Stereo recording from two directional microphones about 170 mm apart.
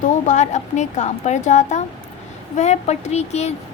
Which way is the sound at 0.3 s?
45° left (ahead or behind).